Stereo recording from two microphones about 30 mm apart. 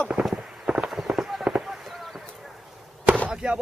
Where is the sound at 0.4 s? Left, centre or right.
Centre.